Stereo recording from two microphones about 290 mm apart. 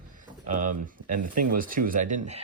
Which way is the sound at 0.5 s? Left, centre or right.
Right.